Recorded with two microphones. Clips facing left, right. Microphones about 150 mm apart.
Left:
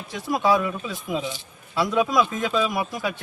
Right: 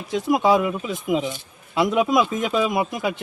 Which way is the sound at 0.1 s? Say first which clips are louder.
Right 3 dB; 20° right (ahead or behind).